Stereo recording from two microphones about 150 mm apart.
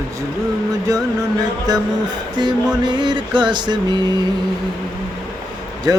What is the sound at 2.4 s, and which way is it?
Speech, 30° right (ahead or behind).